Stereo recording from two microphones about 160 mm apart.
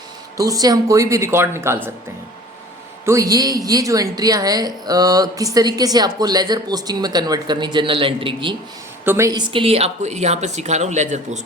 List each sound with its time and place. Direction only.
0.3 s a woman's voice: 20° right (ahead or behind)
3.1 s a woman's voice: 20° right (ahead or behind)
9.0 s a woman's voice: 20° right (ahead or behind)
9.5 s speech: 35° right (ahead or behind)